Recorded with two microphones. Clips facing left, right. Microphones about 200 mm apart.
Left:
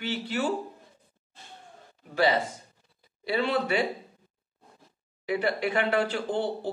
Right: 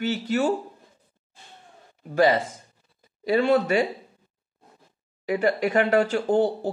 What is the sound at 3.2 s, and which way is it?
Speech, 45° right (ahead or behind).